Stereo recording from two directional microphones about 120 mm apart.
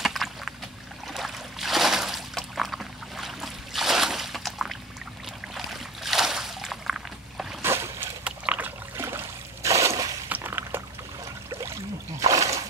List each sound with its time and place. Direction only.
0.0 s boat: centre (ahead or behind)
1.0 s a sound: centre (ahead or behind)
7.6 s boat: 20° right (ahead or behind)
8.2 s trickle: 10° right (ahead or behind); by 10.1 s 25° right (ahead or behind)
10.3 s a sound: 15° right (ahead or behind)
12.2 s splash: 30° right (ahead or behind)